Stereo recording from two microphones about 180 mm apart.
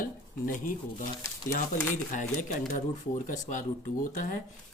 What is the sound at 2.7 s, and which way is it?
Speech, 45° left (ahead or behind).